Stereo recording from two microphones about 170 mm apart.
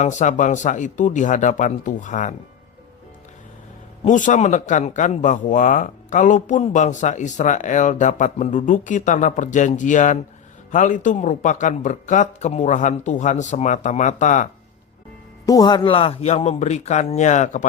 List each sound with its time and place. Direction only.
0.0 s speech: 45° left (ahead or behind)
4.0 s speech: 45° left (ahead or behind)
15.4 s speech: 25° left (ahead or behind); by 17.7 s 45° left (ahead or behind)